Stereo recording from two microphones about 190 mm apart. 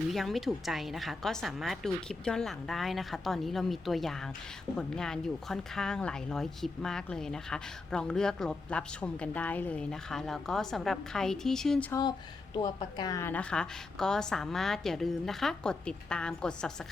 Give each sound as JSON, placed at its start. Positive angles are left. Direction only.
{"t": 0.1, "sound": "speech", "side_deg": 0}
{"t": 11.9, "sound": "speech", "side_deg": 20}